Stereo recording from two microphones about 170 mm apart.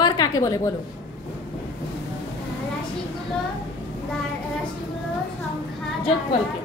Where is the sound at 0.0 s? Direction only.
25° left (ahead or behind).